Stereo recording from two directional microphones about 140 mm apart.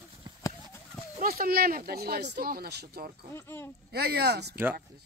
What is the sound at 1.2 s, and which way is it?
Speech, 90° right.